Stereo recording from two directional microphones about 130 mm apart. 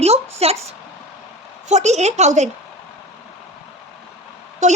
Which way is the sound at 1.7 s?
60° right (ahead or behind).